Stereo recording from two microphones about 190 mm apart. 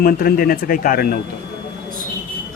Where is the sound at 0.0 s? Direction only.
50° left (ahead or behind).